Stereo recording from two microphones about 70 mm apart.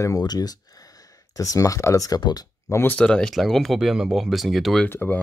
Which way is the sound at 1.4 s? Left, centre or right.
Left.